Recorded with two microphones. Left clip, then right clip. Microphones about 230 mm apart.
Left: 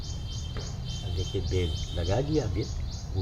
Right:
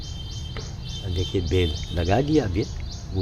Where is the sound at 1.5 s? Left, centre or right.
Right.